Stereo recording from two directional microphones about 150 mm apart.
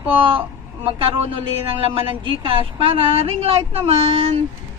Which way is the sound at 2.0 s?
35° right (ahead or behind).